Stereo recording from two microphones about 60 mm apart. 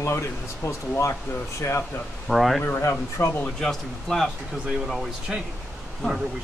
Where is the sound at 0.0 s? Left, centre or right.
Left.